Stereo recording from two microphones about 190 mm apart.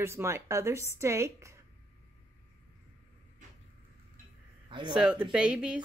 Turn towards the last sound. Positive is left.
turn(degrees=-5)  # may be behind; listen again after turning